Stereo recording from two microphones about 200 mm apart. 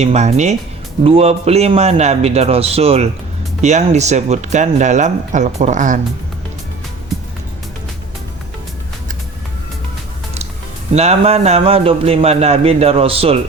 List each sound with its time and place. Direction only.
0.0 s speech: 30° right (ahead or behind)
10.9 s a man's voice: 30° right (ahead or behind)